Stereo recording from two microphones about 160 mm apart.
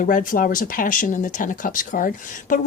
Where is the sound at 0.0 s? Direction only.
55° left (ahead or behind).